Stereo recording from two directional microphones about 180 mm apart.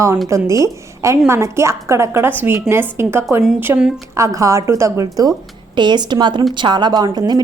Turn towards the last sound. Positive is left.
turn(degrees=-20)  # may be behind; listen again after turning